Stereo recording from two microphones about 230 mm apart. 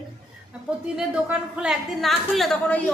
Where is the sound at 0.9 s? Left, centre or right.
Centre.